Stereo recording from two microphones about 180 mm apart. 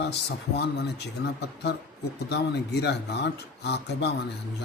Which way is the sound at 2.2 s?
65° left (ahead or behind).